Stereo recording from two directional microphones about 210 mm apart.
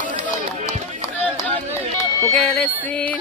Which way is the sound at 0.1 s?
30° right (ahead or behind).